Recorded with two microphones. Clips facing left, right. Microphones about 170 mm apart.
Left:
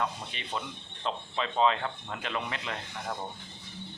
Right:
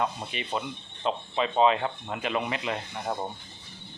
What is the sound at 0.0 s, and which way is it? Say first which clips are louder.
Speech: right 4 dB; 15° right (ahead or behind).